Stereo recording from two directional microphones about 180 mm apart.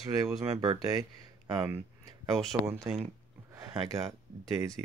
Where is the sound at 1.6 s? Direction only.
15° right (ahead or behind).